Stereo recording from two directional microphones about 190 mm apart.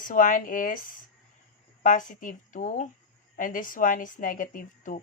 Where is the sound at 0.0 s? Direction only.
45° left (ahead or behind).